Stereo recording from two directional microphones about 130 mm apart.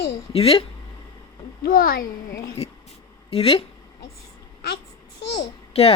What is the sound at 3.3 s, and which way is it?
Speech, 50° left (ahead or behind).